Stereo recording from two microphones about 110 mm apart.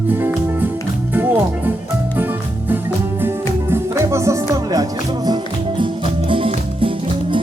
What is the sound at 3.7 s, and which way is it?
Music, 25° right (ahead or behind).